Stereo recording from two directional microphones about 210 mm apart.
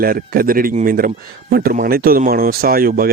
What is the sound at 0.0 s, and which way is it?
Speech, 45° right (ahead or behind).